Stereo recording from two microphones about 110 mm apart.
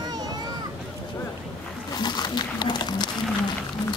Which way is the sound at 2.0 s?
40° left (ahead or behind).